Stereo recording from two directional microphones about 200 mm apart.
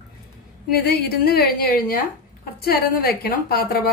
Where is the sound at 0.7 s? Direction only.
50° left (ahead or behind).